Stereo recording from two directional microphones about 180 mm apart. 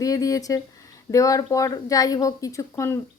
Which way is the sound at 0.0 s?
20° left (ahead or behind).